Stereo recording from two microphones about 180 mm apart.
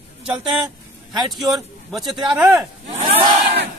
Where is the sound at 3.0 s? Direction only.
25° right (ahead or behind).